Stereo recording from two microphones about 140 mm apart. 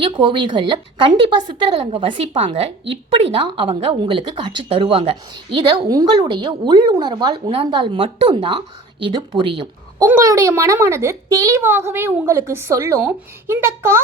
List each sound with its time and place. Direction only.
0.0 s speech: 35° right (ahead or behind)
10.0 s a woman's voice: 25° right (ahead or behind)